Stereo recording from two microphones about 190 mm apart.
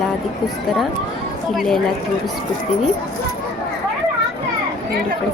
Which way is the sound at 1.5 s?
Centre (ahead or behind).